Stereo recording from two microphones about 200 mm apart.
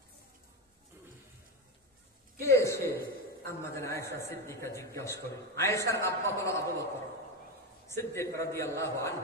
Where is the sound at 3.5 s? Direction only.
15° left (ahead or behind).